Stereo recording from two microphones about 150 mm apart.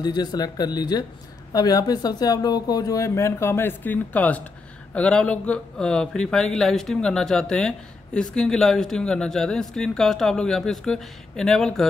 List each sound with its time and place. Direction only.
0.0 s speech: 25° left (ahead or behind); by 11.8 s 5° left (ahead or behind)